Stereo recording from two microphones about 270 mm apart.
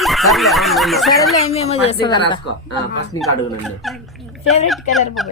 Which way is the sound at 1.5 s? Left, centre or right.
Left.